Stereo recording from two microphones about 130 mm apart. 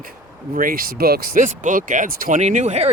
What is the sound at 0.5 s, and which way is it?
Speech, 90° right.